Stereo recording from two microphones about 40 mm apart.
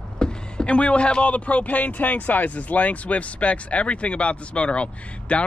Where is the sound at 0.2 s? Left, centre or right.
Left.